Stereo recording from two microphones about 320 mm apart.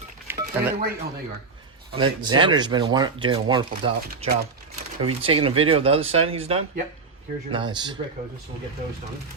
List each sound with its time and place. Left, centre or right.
0.3 s a sound: centre
2.0 s speech: centre
4.0 s speech: right